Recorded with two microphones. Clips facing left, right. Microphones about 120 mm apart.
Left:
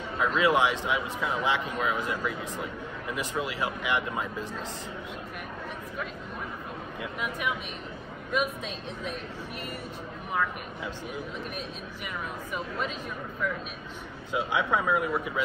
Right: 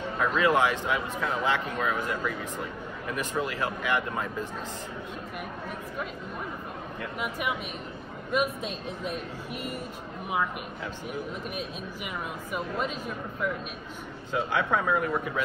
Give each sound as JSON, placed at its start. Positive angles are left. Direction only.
{"t": 0.2, "sound": "a man's voice", "side_deg": 15}
{"t": 7.2, "sound": "speech", "side_deg": -5}
{"t": 12.5, "sound": "speech", "side_deg": -5}
{"t": 14.3, "sound": "a man's voice", "side_deg": 15}